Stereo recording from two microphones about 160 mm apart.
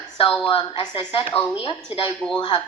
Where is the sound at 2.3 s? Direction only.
30° left (ahead or behind).